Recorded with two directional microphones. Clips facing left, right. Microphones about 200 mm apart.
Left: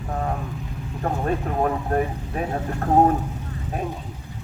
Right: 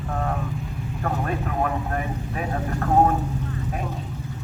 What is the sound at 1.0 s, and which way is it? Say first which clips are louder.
Speech: left 3 dB; 30° left (ahead or behind).